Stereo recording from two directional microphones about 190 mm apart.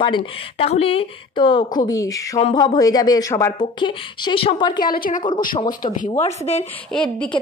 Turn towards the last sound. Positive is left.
turn(degrees=5)  # may be behind; listen again after turning